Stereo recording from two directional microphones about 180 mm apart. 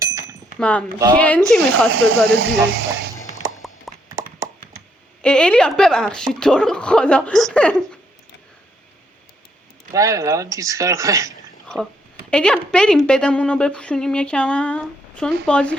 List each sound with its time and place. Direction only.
0.0 s a sound: 20° right (ahead or behind)
0.6 s speech: 5° left (ahead or behind)
1.9 s speech: 90° right
3.9 s clip-clop: centre (ahead or behind)
5.2 s speech: 5° left (ahead or behind)
9.9 s speech: 20° right (ahead or behind)
12.3 s speech: 5° left (ahead or behind)